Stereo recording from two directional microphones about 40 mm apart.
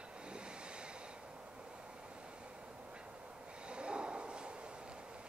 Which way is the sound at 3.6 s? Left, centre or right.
Right.